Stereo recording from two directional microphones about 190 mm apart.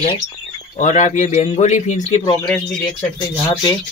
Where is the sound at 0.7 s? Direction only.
40° left (ahead or behind).